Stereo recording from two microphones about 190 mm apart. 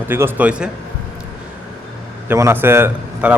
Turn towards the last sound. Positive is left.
turn(degrees=-10)  # may be behind; listen again after turning